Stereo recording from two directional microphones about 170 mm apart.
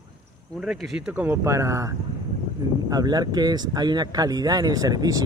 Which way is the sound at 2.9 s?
25° right (ahead or behind).